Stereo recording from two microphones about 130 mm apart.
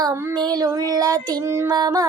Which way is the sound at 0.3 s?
30° right (ahead or behind).